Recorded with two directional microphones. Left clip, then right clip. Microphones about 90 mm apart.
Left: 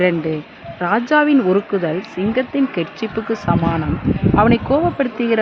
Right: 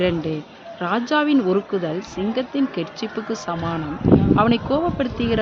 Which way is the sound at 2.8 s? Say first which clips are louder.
Left 5 dB; 60° left (ahead or behind).